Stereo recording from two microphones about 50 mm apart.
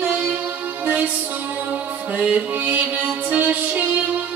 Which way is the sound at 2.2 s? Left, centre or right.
Right.